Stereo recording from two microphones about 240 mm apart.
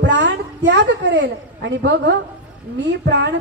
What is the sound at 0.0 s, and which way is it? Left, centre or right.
A woman's voice, right.